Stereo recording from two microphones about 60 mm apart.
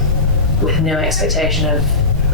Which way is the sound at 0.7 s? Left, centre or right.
Centre.